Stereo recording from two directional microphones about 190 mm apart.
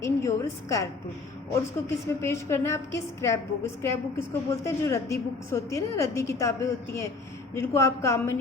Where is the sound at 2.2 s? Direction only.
15° left (ahead or behind).